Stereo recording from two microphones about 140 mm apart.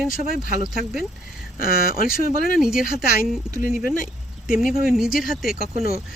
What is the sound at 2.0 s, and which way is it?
Speech, 90° left.